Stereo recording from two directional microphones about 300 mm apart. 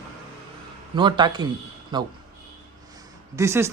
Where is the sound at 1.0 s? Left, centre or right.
Centre.